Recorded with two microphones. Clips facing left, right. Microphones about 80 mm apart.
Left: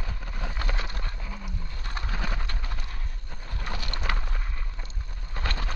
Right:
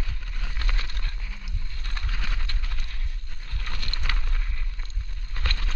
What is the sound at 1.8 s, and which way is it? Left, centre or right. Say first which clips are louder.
Clip-clop: left 4 dB; centre.